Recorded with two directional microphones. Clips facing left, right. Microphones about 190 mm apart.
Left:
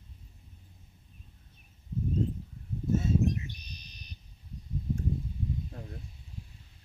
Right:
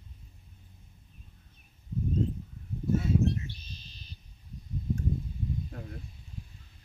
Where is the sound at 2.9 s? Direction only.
20° left (ahead or behind).